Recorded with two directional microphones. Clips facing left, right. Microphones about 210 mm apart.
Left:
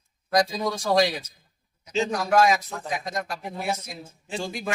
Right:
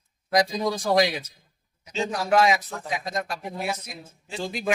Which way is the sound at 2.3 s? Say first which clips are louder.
Even; 20° right (ahead or behind).